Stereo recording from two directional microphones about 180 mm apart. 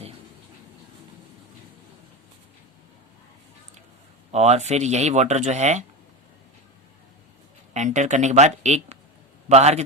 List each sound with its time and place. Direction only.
4.3 s speech: 35° right (ahead or behind)
7.7 s speech: 40° right (ahead or behind)